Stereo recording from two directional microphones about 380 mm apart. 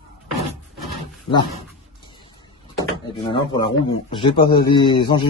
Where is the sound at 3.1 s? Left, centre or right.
Centre.